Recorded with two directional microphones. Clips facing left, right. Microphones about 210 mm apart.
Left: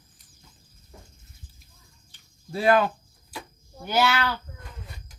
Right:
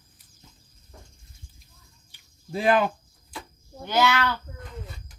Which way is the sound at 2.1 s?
15° right (ahead or behind).